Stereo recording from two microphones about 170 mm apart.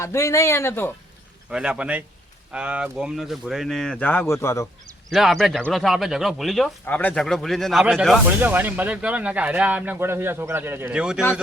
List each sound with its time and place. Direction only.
0.0 s speech: 15° left (ahead or behind)
1.5 s speech: 5° right (ahead or behind); by 4.7 s 15° left (ahead or behind)
5.1 s speech: centre (ahead or behind)